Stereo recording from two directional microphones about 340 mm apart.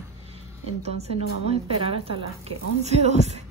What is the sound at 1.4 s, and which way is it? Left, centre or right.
A woman's voice, centre.